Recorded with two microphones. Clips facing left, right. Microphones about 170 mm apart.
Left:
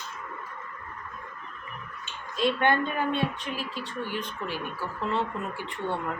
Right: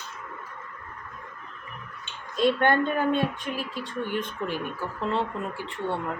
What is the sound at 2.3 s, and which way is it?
A woman's voice, 45° right (ahead or behind).